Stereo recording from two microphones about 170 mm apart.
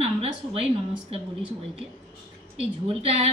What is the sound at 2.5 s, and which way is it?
Speech, 35° right (ahead or behind).